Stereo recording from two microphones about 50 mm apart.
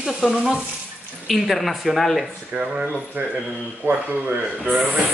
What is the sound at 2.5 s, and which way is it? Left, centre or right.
Speech, right.